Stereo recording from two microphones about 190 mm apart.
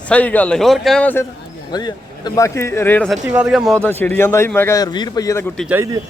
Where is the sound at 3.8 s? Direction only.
10° left (ahead or behind).